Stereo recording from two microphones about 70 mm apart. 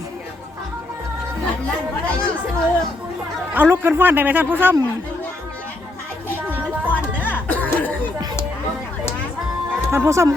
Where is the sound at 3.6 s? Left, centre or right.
Right.